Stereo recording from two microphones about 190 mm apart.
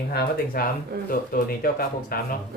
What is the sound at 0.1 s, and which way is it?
Speech, 55° left (ahead or behind).